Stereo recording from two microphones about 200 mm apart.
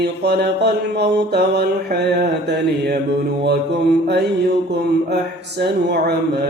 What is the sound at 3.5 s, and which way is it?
Mantra, 55° right (ahead or behind).